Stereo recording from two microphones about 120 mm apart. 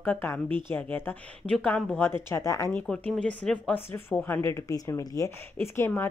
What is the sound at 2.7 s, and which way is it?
Speech, 10° left (ahead or behind).